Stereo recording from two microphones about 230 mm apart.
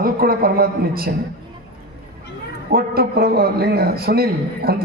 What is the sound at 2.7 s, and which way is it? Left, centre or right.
A man's voice, right.